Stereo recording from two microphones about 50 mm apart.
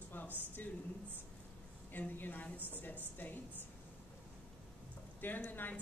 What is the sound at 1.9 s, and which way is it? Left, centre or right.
Speech, left.